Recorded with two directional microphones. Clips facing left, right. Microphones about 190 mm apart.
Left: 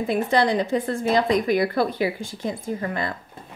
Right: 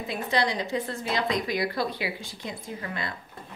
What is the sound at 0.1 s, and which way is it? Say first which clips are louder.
A woman's voice: left 6 dB; 50° left (ahead or behind).